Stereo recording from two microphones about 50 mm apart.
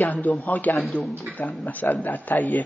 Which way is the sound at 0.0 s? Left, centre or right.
Left.